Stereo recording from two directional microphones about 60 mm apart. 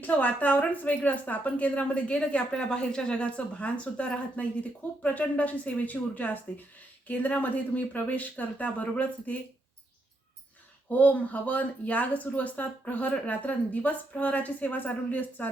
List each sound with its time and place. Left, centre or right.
0.0 s speech: left
10.8 s speech: left